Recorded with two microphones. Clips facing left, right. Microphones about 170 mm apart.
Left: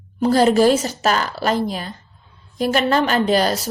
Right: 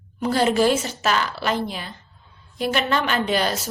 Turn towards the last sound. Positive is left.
turn(degrees=40)  # may be behind; listen again after turning